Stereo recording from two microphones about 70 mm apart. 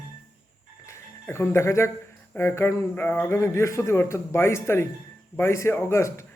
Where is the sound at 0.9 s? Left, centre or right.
Left.